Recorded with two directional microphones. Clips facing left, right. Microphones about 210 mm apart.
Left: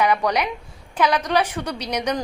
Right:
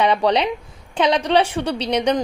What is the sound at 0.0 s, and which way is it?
A woman's voice, 30° right (ahead or behind).